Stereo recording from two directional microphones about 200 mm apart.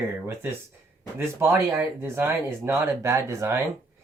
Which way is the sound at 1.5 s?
10° right (ahead or behind).